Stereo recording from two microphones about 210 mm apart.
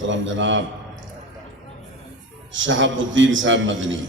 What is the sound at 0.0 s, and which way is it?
Speech, 65° right (ahead or behind).